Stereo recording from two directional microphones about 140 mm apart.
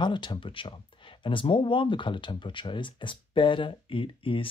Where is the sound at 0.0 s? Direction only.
35° left (ahead or behind).